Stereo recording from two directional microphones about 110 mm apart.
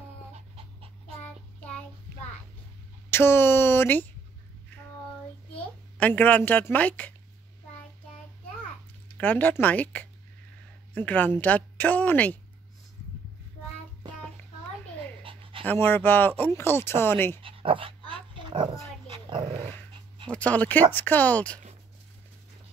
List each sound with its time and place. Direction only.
0.3 s dog: 60° right (ahead or behind)
3.1 s speech: 20° left (ahead or behind)
5.5 s a woman's voice: 15° left (ahead or behind)
9.2 s a woman's voice: 15° left (ahead or behind)
15.6 s speech: 15° left (ahead or behind)
17.4 s dog: 55° right (ahead or behind)
19.5 s dog: 20° left (ahead or behind)
20.2 s a woman's voice: 10° left (ahead or behind)